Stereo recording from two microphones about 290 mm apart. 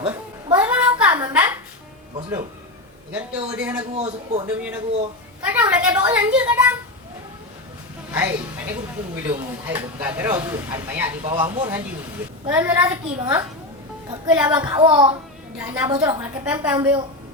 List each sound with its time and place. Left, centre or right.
0.0 s a sound: centre
1.3 s a woman's voice: centre
3.1 s a child's voice: centre
3.9 s speech: centre
5.4 s a child's voice: centre
8.1 s a woman's voice: centre
14.8 s speech: centre
15.5 s speech: centre